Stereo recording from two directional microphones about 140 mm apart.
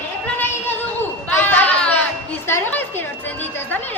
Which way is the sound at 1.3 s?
10° left (ahead or behind).